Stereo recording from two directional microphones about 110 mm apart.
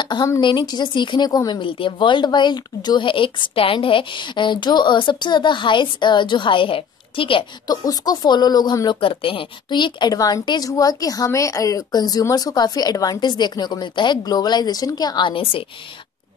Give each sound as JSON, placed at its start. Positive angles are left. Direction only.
{"t": 0.0, "sound": "a woman's voice", "side_deg": 40}
{"t": 1.6, "sound": "speech", "side_deg": 50}
{"t": 7.6, "sound": "a woman's voice", "side_deg": 35}